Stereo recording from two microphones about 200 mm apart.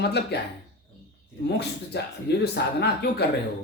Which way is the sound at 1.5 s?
55° left (ahead or behind).